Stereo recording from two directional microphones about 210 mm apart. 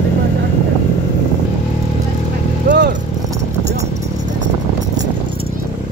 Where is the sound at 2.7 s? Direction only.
55° right (ahead or behind).